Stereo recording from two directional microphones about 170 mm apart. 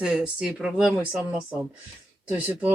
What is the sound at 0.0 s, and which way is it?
Speech, 5° right (ahead or behind).